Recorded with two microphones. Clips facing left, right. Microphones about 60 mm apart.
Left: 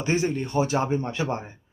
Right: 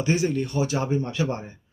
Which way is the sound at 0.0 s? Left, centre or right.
Left.